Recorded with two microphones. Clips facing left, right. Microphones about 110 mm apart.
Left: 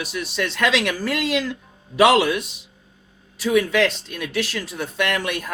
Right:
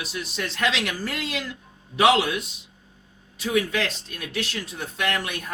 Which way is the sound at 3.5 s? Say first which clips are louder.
Left 6 dB; 85° left.